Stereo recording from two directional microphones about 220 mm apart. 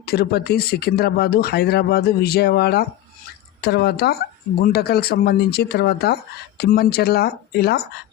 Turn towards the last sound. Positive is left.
turn(degrees=45)  # may be behind; listen again after turning